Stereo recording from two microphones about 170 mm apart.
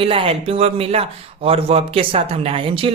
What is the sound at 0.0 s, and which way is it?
Speech, 35° right (ahead or behind).